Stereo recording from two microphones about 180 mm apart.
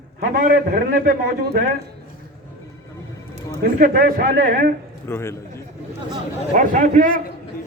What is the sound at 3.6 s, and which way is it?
A man's voice, 55° right (ahead or behind).